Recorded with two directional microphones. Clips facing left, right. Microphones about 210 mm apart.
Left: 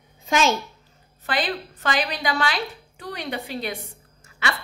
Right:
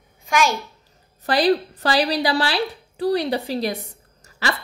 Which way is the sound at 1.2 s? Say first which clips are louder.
Right 9 dB; 40° right (ahead or behind).